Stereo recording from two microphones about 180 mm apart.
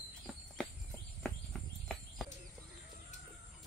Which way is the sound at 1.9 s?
5° left (ahead or behind).